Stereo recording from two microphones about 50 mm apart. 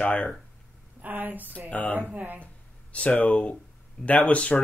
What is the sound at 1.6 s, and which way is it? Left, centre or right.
Speech, left.